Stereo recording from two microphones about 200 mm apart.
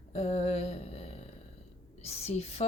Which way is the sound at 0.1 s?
30° left (ahead or behind).